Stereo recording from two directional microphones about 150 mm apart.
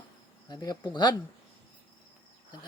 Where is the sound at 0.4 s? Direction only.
25° left (ahead or behind).